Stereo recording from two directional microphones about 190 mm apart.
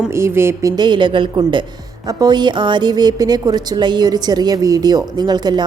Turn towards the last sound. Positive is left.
turn(degrees=-20)  # may be behind; listen again after turning